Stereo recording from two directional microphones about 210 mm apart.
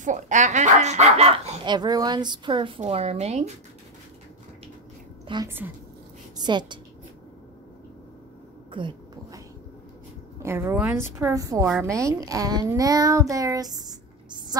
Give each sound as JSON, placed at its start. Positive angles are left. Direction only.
{"t": 0.0, "sound": "speech", "side_deg": -35}
{"t": 5.3, "sound": "a child's voice", "side_deg": -15}
{"t": 8.7, "sound": "a sound", "side_deg": -20}
{"t": 10.4, "sound": "a child's voice", "side_deg": -10}